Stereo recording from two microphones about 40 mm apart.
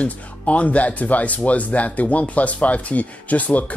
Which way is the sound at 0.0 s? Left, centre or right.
Left.